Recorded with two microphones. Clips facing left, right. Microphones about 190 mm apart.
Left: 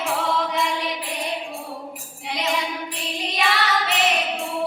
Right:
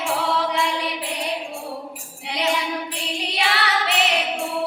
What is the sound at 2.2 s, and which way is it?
Child singing, 70° right (ahead or behind).